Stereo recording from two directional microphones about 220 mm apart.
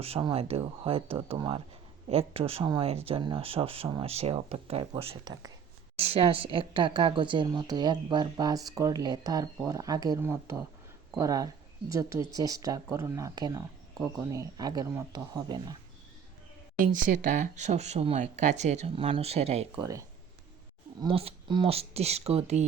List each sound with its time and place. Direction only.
0.0 s a woman's voice: 25° right (ahead or behind)
16.8 s speech: 35° right (ahead or behind)
19.7 s speech: 15° right (ahead or behind)
21.0 s a woman's voice: 25° right (ahead or behind)